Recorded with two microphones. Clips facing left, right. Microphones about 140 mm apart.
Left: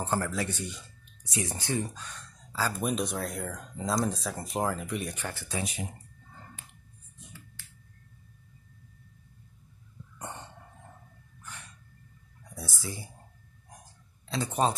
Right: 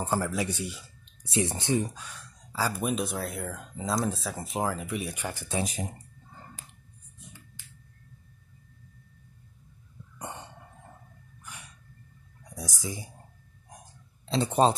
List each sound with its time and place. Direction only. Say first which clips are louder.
0.0 s speech: right 2 dB; 10° right (ahead or behind)
1.2 s speech: right 5 dB; 25° right (ahead or behind)
5.6 s speech: right 4 dB; 40° right (ahead or behind)
10.1 s cough: right 1 dB; 10° right (ahead or behind)
11.4 s a sound: even; 10° right (ahead or behind)
12.4 s speech: right 3 dB; 15° right (ahead or behind)
14.2 s speech: right 5 dB; 25° right (ahead or behind)